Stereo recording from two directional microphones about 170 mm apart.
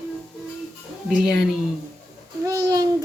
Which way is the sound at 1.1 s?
5° right (ahead or behind).